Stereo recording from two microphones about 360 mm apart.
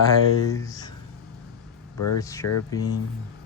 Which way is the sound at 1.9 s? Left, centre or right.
Left.